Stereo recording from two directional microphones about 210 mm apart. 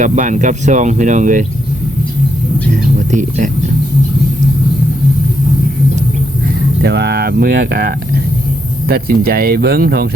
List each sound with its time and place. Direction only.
0.0 s speech: 35° right (ahead or behind)
3.1 s speech: 35° right (ahead or behind)
6.8 s speech: 50° right (ahead or behind)